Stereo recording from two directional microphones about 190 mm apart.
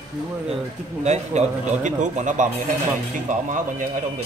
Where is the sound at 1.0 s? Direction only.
35° right (ahead or behind).